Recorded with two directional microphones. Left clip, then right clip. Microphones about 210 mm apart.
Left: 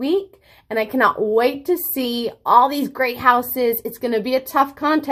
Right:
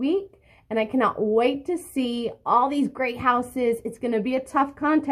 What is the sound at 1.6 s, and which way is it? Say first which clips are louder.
Speech: left 6 dB; 60° left (ahead or behind).